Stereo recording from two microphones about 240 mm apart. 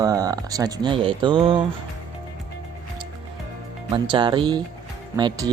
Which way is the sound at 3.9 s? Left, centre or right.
Centre.